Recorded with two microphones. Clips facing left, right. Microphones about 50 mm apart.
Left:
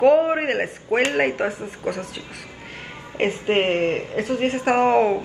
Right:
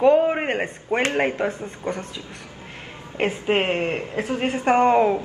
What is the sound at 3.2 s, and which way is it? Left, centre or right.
A woman's voice, centre.